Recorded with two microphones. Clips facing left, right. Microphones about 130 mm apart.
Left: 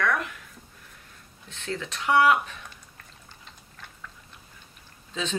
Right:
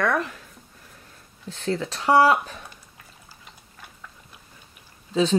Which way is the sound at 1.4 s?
35° right (ahead or behind).